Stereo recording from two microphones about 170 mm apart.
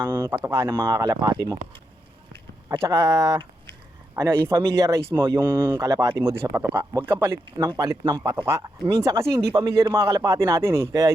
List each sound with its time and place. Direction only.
0.0 s a man's voice: 25° right (ahead or behind)